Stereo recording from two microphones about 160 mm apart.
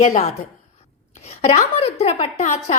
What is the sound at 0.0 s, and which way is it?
Speech, 40° left (ahead or behind).